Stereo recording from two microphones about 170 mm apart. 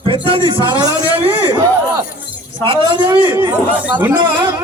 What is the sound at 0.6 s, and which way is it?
Speech, 25° left (ahead or behind).